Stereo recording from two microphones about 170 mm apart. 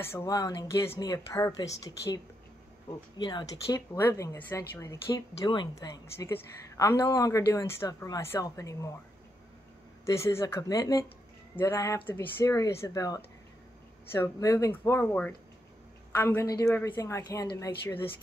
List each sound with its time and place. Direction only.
0.0 s speech: 15° left (ahead or behind)
10.1 s a woman's voice: 15° left (ahead or behind)